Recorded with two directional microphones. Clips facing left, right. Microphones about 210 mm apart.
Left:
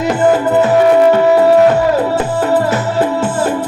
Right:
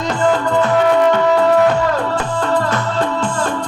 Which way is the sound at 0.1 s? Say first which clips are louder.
Left 4 dB; 20° left (ahead or behind).